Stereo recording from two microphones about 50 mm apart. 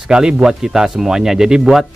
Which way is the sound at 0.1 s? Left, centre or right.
Centre.